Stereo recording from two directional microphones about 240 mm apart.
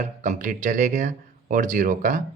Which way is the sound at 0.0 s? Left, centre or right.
Right.